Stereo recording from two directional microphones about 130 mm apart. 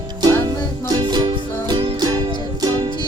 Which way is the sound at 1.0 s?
35° right (ahead or behind).